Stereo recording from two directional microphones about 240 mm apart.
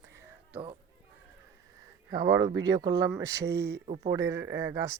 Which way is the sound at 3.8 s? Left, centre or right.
Right.